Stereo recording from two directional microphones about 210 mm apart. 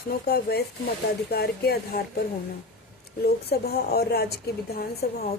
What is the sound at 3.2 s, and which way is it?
Speech, 50° left (ahead or behind).